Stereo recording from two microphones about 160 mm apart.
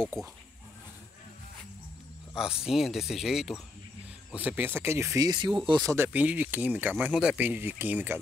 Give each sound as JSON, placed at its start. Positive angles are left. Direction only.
{"t": 2.3, "sound": "speech", "side_deg": -5}
{"t": 6.0, "sound": "speech", "side_deg": -10}